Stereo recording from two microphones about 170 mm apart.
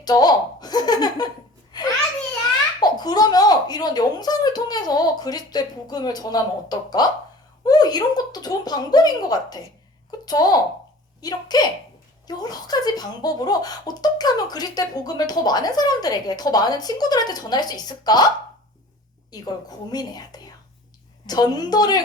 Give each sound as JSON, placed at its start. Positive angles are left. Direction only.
{"t": 0.0, "sound": "speech", "side_deg": 25}
{"t": 1.7, "sound": "a sound", "side_deg": 25}
{"t": 2.8, "sound": "speech", "side_deg": 25}
{"t": 19.3, "sound": "speech", "side_deg": 25}